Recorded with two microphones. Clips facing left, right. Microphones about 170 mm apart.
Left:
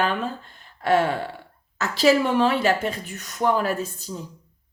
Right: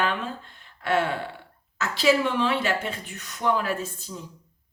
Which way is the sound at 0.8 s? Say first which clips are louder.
Left 4 dB; 40° left (ahead or behind).